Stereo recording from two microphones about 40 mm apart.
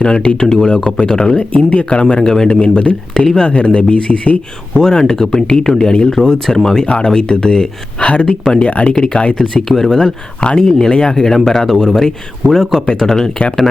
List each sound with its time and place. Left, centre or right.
0.0 s speech: left
1.4 s speech: left
3.2 s speech: centre
3.5 s speech: left
6.8 s speech: left
9.6 s speech: centre